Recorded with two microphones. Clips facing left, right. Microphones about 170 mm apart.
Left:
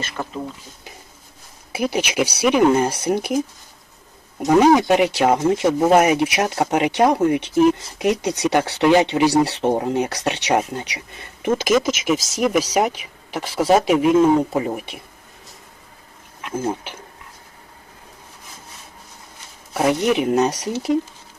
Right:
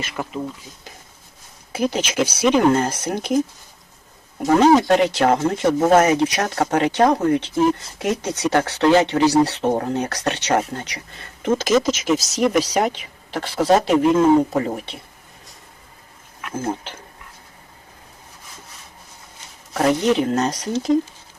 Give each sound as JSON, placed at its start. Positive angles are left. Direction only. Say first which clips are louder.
{"t": 1.7, "sound": "speech", "louder": "even", "side_deg": 10}
{"t": 4.4, "sound": "speech", "louder": "even", "side_deg": 10}
{"t": 16.6, "sound": "speech", "louder": "left 1 dB", "side_deg": 10}
{"t": 19.7, "sound": "speech", "louder": "right 1 dB", "side_deg": 10}